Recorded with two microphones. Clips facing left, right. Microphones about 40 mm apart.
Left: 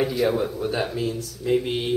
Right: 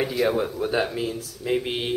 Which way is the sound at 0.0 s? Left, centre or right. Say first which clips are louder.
Left 1 dB; centre.